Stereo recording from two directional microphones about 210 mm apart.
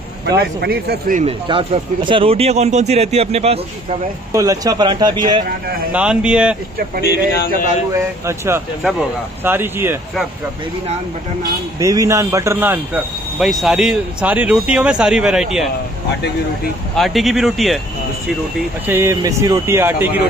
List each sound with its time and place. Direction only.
0.4 s speech: 50° right (ahead or behind)
1.2 s speech: 25° right (ahead or behind)
4.3 s speech: 15° right (ahead or behind)
5.9 s speech: 5° right (ahead or behind)
7.1 s speech: 50° left (ahead or behind)
8.3 s speech: 10° right (ahead or behind)
11.8 s speech: 15° right (ahead or behind)
16.9 s speech: centre (ahead or behind)
18.9 s speech: 10° right (ahead or behind)